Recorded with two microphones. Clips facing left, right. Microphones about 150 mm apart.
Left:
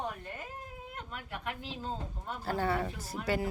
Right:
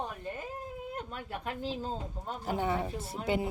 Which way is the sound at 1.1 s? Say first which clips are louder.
Right 2 dB; 35° right (ahead or behind).